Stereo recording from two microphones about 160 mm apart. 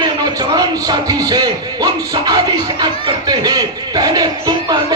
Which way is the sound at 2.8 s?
25° right (ahead or behind).